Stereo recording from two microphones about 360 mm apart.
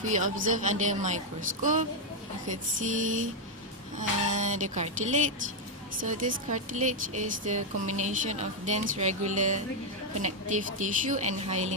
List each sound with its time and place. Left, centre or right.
0.1 s a woman's voice: right